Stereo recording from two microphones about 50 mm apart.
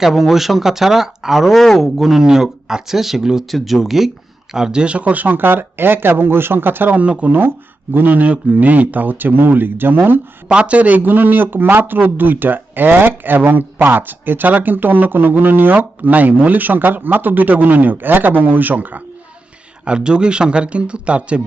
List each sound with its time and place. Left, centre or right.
0.0 s speech: centre; by 6.9 s right
6.9 s speech: right
10.5 s speech: right
19.8 s speech: centre